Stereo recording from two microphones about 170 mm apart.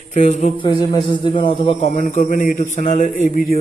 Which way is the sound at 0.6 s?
25° left (ahead or behind).